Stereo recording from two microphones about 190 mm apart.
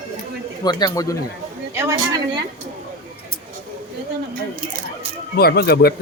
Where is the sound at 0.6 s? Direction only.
20° left (ahead or behind).